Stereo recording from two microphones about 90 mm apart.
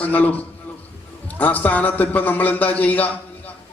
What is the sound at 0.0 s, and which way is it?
Speech, 20° left (ahead or behind).